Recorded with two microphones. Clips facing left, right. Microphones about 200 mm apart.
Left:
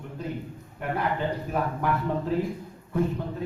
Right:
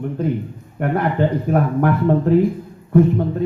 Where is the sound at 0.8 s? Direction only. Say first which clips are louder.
Right 9 dB; 60° right (ahead or behind).